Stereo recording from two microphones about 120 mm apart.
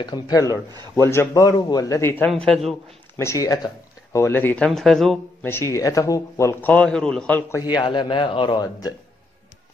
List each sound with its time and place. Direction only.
0.0 s a man's voice: 30° left (ahead or behind); by 2.3 s 15° left (ahead or behind)
2.4 s speech: centre (ahead or behind)
3.2 s speech: 25° left (ahead or behind)
4.6 s speech: centre (ahead or behind)
5.4 s a man's voice: 20° left (ahead or behind)
6.7 s a man's voice: 5° left (ahead or behind)
7.7 s a man's voice: 40° left (ahead or behind)